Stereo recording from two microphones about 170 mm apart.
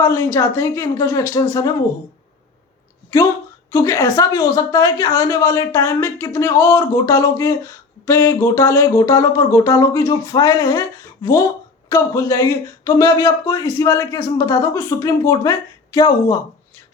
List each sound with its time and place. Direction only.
0.0 s speech: 10° left (ahead or behind)
3.7 s speech: 15° left (ahead or behind)